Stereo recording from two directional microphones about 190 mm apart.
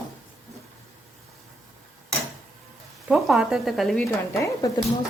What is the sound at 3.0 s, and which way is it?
A woman's voice, centre (ahead or behind).